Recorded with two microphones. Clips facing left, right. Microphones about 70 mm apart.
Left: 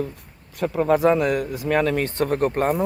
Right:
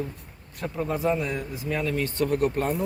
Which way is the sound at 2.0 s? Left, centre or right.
Left.